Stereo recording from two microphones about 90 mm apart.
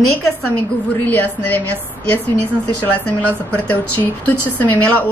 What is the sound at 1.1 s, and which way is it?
A woman's voice, 20° left (ahead or behind).